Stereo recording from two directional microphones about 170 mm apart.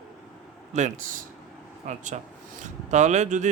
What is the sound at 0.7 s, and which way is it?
Speech, 45° right (ahead or behind).